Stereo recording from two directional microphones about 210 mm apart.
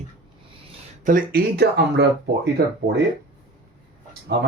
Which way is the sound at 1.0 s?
45° right (ahead or behind).